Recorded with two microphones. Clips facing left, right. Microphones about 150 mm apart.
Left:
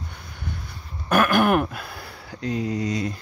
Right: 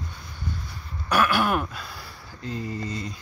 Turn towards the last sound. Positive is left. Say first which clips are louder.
# left 6 dB
turn(degrees=85)